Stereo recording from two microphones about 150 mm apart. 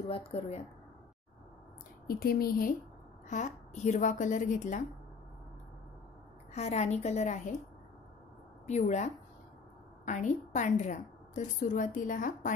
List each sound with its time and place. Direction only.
0.1 s speech: 40° left (ahead or behind)
2.0 s speech: 90° left
3.3 s a woman's voice: 55° left (ahead or behind)
6.5 s a woman's voice: 45° left (ahead or behind)
8.6 s a woman's voice: 50° left (ahead or behind)